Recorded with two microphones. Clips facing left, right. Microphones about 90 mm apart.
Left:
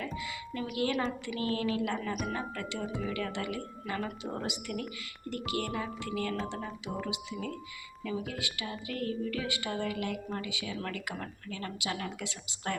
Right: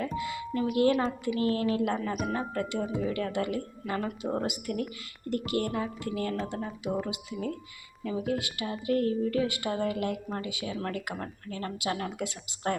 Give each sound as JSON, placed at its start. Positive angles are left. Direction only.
{"t": 0.0, "sound": "a sound", "side_deg": -40}
{"t": 0.6, "sound": "speech", "side_deg": -35}
{"t": 2.9, "sound": "speech", "side_deg": -40}